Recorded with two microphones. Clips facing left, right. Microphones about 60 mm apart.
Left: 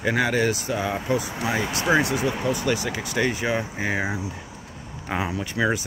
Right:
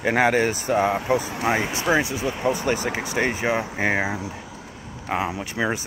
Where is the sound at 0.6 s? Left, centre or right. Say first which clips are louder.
Right 5 dB; right.